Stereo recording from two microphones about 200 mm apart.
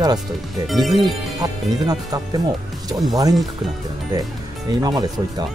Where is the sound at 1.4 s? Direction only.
20° right (ahead or behind).